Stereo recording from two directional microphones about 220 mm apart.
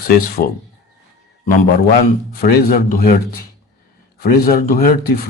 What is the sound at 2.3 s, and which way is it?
Speech, 45° left (ahead or behind).